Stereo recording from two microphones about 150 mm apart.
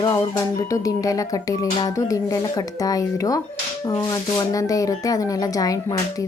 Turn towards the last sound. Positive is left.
turn(degrees=25)  # may be behind; listen again after turning